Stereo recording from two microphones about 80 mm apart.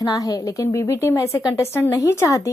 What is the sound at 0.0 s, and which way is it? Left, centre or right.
A woman's voice, left.